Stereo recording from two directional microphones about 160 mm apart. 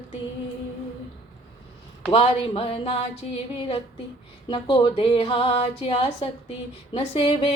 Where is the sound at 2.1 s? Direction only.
40° left (ahead or behind).